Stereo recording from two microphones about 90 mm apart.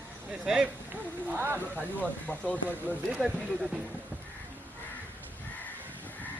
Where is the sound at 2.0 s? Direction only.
10° left (ahead or behind).